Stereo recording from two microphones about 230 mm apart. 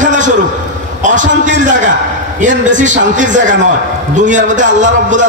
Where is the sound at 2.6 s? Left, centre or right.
Right.